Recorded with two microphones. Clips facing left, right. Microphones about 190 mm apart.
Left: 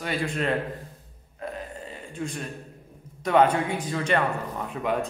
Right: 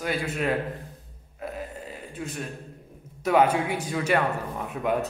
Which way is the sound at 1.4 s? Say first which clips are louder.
Even; 5° right (ahead or behind).